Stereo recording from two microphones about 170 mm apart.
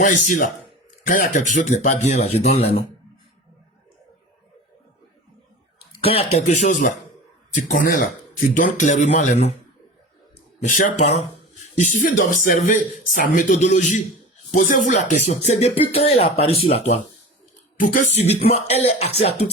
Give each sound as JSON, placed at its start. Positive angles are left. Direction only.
{"t": 0.0, "sound": "speech", "side_deg": 50}
{"t": 6.0, "sound": "speech", "side_deg": 35}
{"t": 10.7, "sound": "speech", "side_deg": 50}
{"t": 17.7, "sound": "speech", "side_deg": 50}